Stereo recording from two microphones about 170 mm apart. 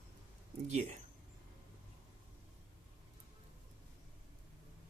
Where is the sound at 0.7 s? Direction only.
40° right (ahead or behind).